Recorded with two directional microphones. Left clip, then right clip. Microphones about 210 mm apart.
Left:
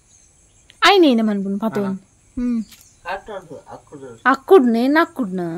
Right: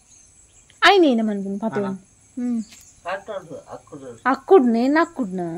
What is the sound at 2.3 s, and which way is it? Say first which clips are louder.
Speech: left 3 dB; 25° left (ahead or behind).